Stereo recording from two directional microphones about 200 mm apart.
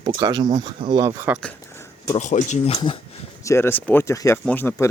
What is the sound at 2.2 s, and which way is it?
Speech, 35° left (ahead or behind).